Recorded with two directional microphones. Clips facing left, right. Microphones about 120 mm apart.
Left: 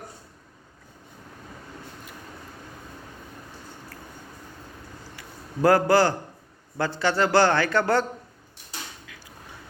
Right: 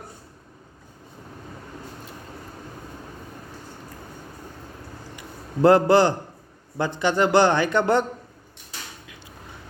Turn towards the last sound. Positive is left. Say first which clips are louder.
# right 2 dB
turn(degrees=-20)  # may be behind; listen again after turning